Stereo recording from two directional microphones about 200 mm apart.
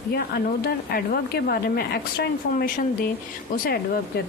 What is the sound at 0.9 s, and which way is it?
Speech, 50° left (ahead or behind).